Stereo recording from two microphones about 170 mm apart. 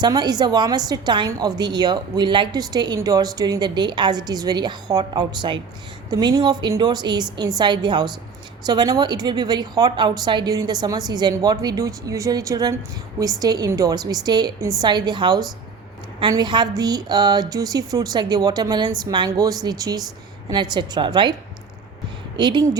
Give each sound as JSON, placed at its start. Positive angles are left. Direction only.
{"t": 0.0, "sound": "a woman's voice", "side_deg": -25}
{"t": 22.4, "sound": "a woman's voice", "side_deg": -25}